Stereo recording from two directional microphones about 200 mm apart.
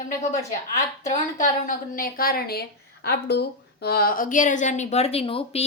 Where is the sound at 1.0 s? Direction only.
40° left (ahead or behind).